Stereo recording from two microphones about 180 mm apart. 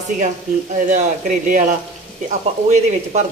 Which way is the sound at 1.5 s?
45° right (ahead or behind).